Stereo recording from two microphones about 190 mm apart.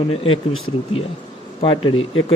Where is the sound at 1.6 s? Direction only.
25° left (ahead or behind).